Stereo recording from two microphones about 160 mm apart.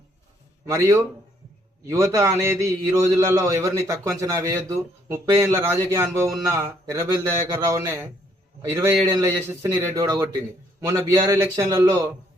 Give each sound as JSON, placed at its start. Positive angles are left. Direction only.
{"t": 0.7, "sound": "a man's voice", "side_deg": -20}